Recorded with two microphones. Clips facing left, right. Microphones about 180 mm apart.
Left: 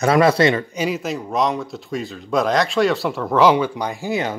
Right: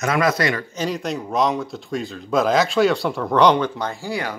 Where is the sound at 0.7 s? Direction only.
10° left (ahead or behind).